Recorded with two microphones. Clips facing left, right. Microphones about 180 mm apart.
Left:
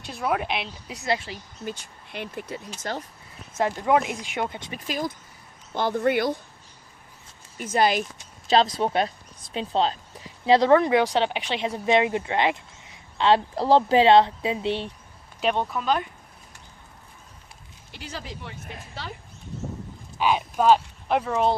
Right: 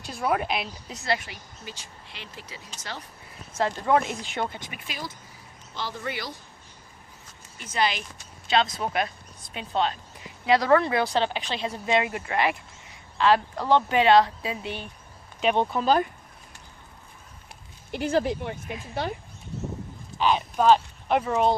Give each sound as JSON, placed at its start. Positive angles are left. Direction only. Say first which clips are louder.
{"t": 0.0, "sound": "a woman's voice", "louder": "even", "side_deg": 0}
{"t": 0.9, "sound": "speech", "louder": "left 2 dB", "side_deg": 20}
{"t": 1.6, "sound": "speech", "louder": "left 9 dB", "side_deg": 55}
{"t": 3.6, "sound": "speech", "louder": "left 1 dB", "side_deg": 15}
{"t": 4.7, "sound": "speech", "louder": "left 8 dB", "side_deg": 45}
{"t": 7.6, "sound": "speech", "louder": "left 5 dB", "side_deg": 50}
{"t": 8.4, "sound": "speech", "louder": "left 4 dB", "side_deg": 35}
{"t": 15.5, "sound": "speech", "louder": "right 3 dB", "side_deg": -30}
{"t": 17.9, "sound": "speech", "louder": "right 13 dB", "side_deg": -50}
{"t": 20.1, "sound": "speech", "louder": "even", "side_deg": 10}